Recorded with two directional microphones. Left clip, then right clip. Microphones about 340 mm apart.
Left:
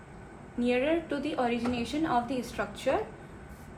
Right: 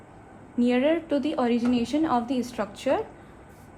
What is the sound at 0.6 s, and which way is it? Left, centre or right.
A woman's voice, right.